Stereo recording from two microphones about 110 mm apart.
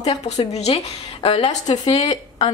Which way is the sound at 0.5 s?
75° left (ahead or behind).